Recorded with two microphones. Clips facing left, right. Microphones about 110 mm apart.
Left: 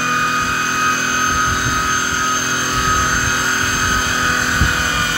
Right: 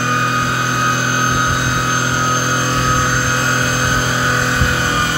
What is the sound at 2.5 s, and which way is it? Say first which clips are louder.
Vehicle: right 3 dB; 30° right (ahead or behind).